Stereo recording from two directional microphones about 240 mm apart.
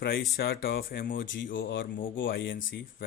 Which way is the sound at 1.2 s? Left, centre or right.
Left.